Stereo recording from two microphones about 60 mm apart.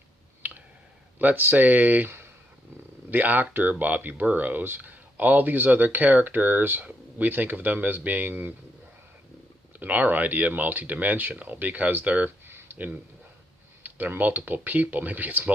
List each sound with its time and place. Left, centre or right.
1.2 s speech: right
9.8 s speech: right
12.5 s a sound: right
12.7 s speech: right